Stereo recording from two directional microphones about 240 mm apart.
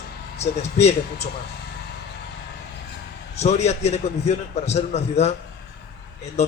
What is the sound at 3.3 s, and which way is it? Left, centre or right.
A man's voice, left.